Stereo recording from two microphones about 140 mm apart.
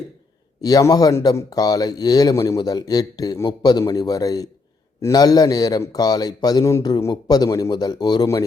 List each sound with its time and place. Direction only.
0.6 s speech: 25° left (ahead or behind)